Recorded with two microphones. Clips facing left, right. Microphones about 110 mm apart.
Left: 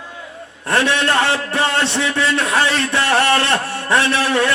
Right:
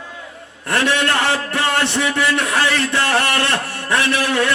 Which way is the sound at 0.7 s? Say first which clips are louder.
Left 1 dB; 20° left (ahead or behind).